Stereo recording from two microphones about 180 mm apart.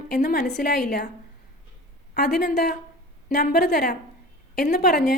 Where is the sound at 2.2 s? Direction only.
60° left (ahead or behind).